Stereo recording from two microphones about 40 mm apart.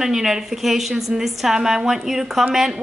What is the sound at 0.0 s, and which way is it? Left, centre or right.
A woman's voice, centre.